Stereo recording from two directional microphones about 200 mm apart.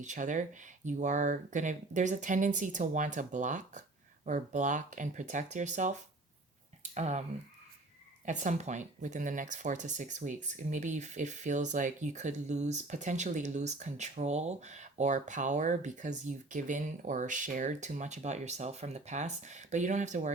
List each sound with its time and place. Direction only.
0.0 s speech: 40° right (ahead or behind)